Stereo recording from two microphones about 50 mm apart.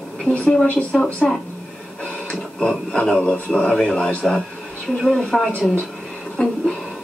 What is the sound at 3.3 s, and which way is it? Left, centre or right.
Speech, left.